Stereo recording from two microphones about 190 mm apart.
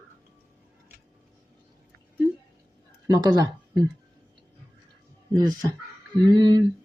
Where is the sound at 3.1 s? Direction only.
20° right (ahead or behind).